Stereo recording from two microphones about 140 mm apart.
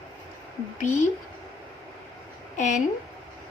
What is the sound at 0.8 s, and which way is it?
Speech, 65° left (ahead or behind).